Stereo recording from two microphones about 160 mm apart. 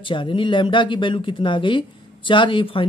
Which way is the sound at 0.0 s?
30° left (ahead or behind).